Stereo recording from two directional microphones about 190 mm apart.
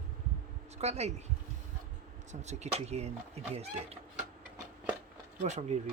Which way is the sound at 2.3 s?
35° right (ahead or behind).